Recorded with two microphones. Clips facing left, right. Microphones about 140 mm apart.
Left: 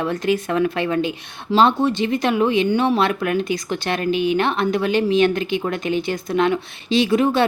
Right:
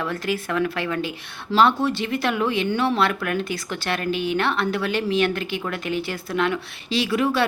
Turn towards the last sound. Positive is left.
turn(degrees=25)  # may be behind; listen again after turning